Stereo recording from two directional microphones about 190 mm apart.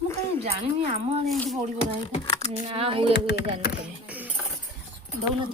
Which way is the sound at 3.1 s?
65° left (ahead or behind).